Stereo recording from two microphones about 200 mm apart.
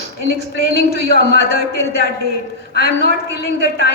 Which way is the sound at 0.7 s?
55° left (ahead or behind).